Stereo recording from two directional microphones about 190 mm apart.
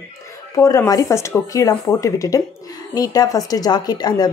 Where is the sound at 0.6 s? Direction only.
20° left (ahead or behind).